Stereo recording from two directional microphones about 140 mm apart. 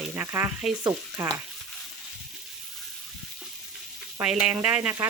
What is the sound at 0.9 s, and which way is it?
Speech, 20° right (ahead or behind).